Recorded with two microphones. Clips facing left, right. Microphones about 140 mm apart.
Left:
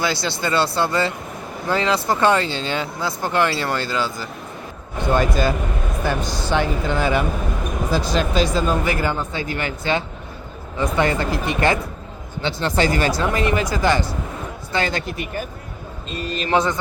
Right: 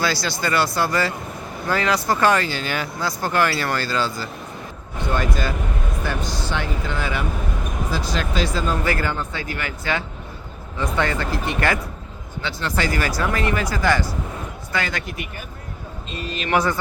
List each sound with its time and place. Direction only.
0.0 s speech: 20° left (ahead or behind)
10.8 s speech: 15° left (ahead or behind); by 16.5 s 35° left (ahead or behind)
16.5 s speech: 20° left (ahead or behind)